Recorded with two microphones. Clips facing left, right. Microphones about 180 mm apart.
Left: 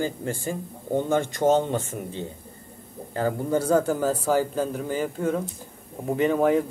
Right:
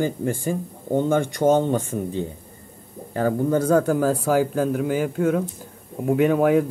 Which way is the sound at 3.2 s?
10° left (ahead or behind).